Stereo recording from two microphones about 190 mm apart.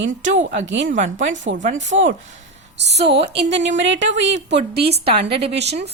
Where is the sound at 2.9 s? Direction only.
35° right (ahead or behind).